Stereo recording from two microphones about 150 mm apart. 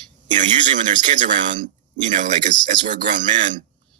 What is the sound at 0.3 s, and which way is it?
Speech, 55° right (ahead or behind).